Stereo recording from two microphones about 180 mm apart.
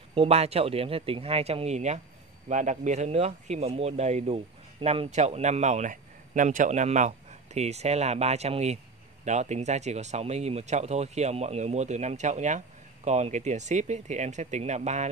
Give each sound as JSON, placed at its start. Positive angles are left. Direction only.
{"t": 0.1, "sound": "a man's voice", "side_deg": -35}